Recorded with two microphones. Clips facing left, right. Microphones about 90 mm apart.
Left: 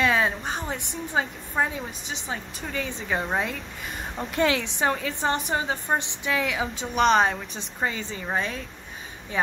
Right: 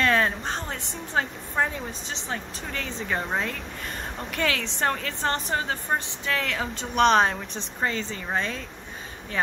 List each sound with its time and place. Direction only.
0.0 s a woman's voice: 5° left (ahead or behind)
4.3 s a woman's voice: 25° left (ahead or behind)
4.6 s a woman's voice: 5° left (ahead or behind)